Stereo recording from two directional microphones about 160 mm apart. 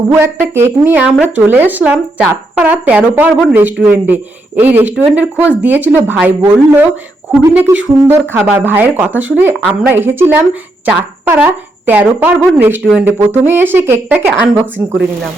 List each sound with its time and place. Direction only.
0.1 s a man's voice: 15° right (ahead or behind)